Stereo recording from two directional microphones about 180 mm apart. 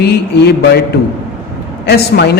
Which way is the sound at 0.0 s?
65° left (ahead or behind).